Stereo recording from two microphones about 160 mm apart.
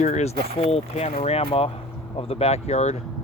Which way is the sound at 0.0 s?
45° left (ahead or behind).